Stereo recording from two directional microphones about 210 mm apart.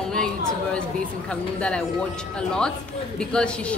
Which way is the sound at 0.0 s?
5° left (ahead or behind).